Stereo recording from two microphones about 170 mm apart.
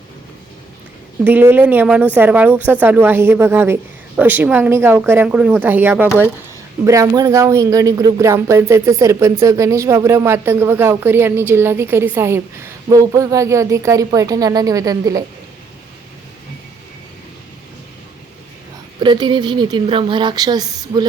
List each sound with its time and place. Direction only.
1.2 s speech: 10° right (ahead or behind)
18.9 s speech: 25° right (ahead or behind)